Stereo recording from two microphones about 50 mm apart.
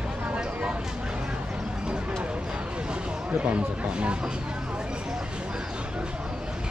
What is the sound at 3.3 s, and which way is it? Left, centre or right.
Speech, right.